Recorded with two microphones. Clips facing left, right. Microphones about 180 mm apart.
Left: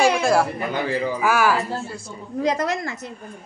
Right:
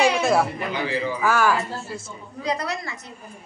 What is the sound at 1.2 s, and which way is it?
Speech, 10° left (ahead or behind).